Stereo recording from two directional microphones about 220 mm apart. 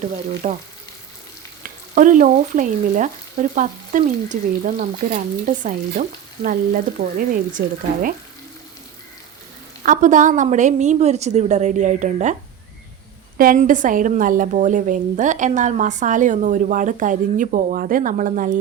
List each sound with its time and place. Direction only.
0.4 s a woman's voice: 35° right (ahead or behind)
1.6 s a woman's voice: 35° right (ahead or behind)
9.8 s a woman's voice: 35° right (ahead or behind)